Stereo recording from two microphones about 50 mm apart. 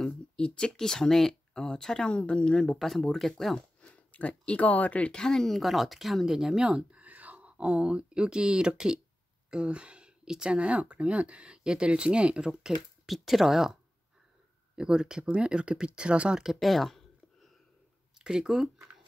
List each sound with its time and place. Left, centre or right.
0.0 s speech: centre
2.7 s speech: centre
3.5 s speech: left
5.1 s speech: centre
6.9 s speech: right
12.7 s speech: centre
14.8 s speech: centre
16.6 s speech: centre
18.2 s speech: centre